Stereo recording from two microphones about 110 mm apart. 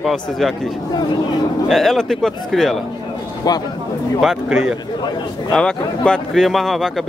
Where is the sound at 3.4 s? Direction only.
35° left (ahead or behind).